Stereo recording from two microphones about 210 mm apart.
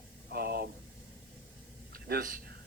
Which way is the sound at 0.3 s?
50° right (ahead or behind).